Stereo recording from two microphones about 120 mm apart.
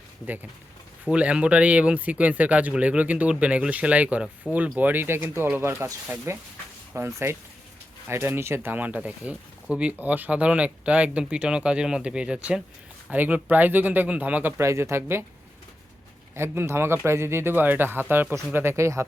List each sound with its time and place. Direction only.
1.1 s speech: 10° right (ahead or behind)
16.3 s speech: 20° right (ahead or behind)